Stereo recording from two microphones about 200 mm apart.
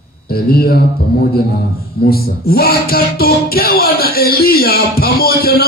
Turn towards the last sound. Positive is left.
turn(degrees=50)  # may be behind; listen again after turning